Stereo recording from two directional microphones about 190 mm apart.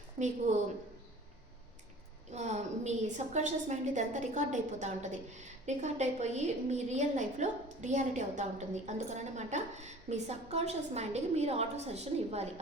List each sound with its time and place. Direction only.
0.2 s a woman's voice: 40° right (ahead or behind)
2.3 s a woman's voice: 35° right (ahead or behind)